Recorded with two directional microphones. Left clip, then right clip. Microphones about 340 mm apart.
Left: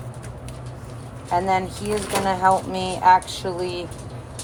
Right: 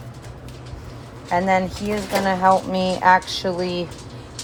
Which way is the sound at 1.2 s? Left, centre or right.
Centre.